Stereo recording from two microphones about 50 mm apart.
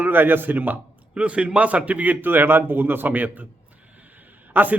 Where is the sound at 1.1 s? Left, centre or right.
Right.